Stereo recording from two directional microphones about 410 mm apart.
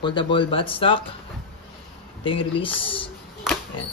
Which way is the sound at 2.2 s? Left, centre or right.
Centre.